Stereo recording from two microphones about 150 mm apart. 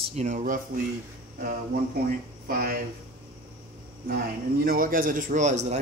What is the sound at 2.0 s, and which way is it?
Speech, 75° right (ahead or behind).